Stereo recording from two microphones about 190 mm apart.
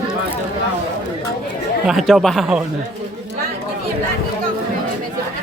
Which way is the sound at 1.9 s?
Centre (ahead or behind).